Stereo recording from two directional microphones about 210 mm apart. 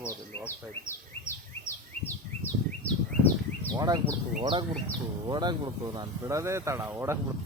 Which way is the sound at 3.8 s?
20° right (ahead or behind).